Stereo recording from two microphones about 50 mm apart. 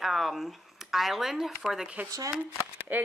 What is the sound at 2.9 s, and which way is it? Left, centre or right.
Speech, right.